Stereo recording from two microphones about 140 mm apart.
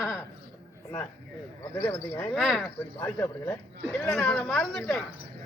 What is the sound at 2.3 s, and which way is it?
Speech, centre (ahead or behind).